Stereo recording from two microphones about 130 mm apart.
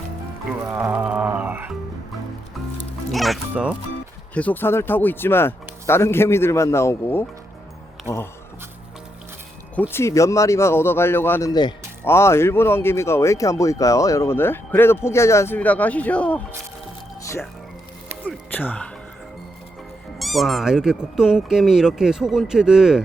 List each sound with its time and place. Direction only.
0.7 s a sound: 10° right (ahead or behind)
3.1 s speech: centre (ahead or behind)
3.5 s speech: 10° right (ahead or behind)
4.4 s speech: 15° left (ahead or behind)
9.9 s speech: 20° left (ahead or behind)
18.5 s speech: 10° left (ahead or behind)
20.1 s speech: centre (ahead or behind)